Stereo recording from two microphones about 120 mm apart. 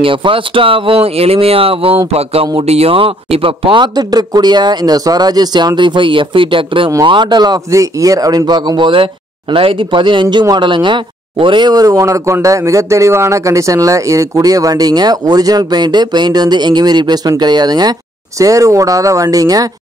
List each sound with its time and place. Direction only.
0.0 s speech: 45° right (ahead or behind); by 19.7 s 30° right (ahead or behind)